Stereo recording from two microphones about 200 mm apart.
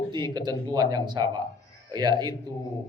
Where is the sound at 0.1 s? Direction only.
20° right (ahead or behind).